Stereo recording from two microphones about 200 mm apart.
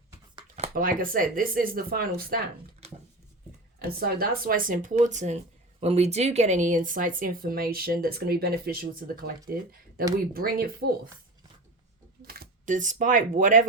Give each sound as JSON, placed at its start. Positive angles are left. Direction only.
{"t": 0.3, "sound": "a sound", "side_deg": -35}
{"t": 0.7, "sound": "speech", "side_deg": -45}
{"t": 3.9, "sound": "speech", "side_deg": -45}
{"t": 12.2, "sound": "speech", "side_deg": -50}